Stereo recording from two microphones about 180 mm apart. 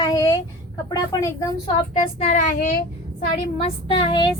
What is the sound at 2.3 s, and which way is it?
Speech, 45° left (ahead or behind).